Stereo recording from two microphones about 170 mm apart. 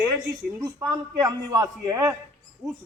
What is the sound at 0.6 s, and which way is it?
A man's voice, 20° right (ahead or behind).